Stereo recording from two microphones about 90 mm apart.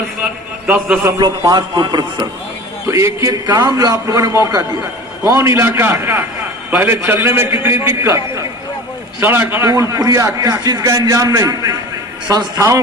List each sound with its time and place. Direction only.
1.4 s a man's voice: 45° right (ahead or behind)
2.8 s a man's voice: 30° right (ahead or behind)
3.4 s a man's voice: 45° right (ahead or behind); by 9.6 s 25° right (ahead or behind)
9.6 s a man's voice: 40° right (ahead or behind)